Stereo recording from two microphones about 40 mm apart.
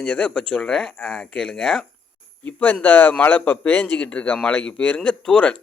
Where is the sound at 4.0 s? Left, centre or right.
Left.